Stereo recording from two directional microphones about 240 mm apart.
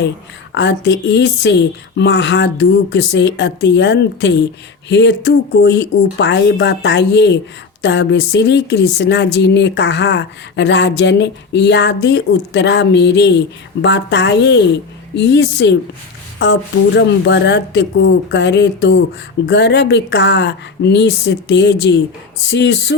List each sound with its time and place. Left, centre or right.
0.5 s speech: left